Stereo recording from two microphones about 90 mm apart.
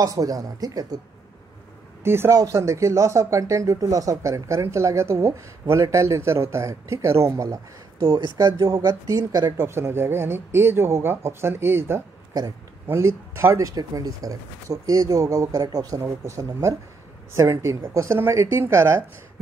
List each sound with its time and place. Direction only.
0.0 s speech: 40° right (ahead or behind)
2.0 s speech: 25° right (ahead or behind)